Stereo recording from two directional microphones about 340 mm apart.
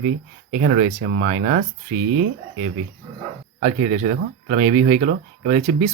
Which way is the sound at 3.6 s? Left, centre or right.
Right.